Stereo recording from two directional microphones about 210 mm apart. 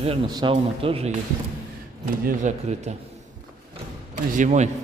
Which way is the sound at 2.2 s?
35° right (ahead or behind).